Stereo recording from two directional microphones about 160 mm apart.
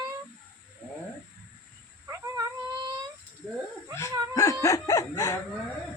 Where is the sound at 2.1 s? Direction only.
20° right (ahead or behind).